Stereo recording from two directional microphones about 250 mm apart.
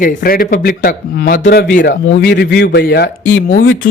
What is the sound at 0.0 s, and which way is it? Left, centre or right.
Speech, left.